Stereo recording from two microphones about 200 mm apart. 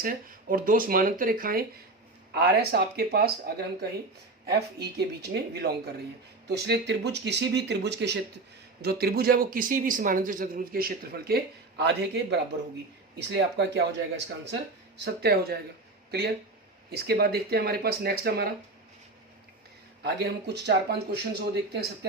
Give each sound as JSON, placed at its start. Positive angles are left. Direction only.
{"t": 0.0, "sound": "speech", "side_deg": -45}
{"t": 16.9, "sound": "speech", "side_deg": -50}
{"t": 20.0, "sound": "speech", "side_deg": -55}